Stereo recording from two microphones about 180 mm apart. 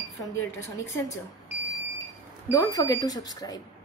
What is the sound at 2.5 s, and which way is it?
Speech, 20° left (ahead or behind).